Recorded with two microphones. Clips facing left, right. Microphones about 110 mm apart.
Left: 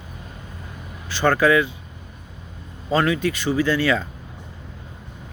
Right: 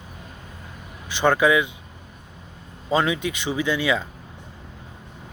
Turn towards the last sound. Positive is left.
turn(degrees=-15)  # may be behind; listen again after turning